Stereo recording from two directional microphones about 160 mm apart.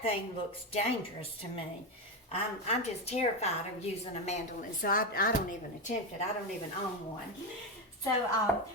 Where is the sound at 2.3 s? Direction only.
40° left (ahead or behind).